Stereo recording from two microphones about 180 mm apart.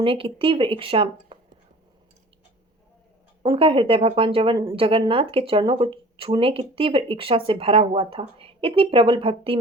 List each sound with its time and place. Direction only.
0.0 s speech: 30° right (ahead or behind)
3.4 s speech: 30° right (ahead or behind)